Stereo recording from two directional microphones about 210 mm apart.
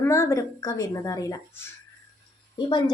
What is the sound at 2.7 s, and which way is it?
Speech, 20° left (ahead or behind).